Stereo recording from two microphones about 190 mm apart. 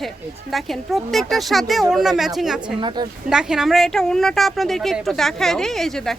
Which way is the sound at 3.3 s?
5° right (ahead or behind).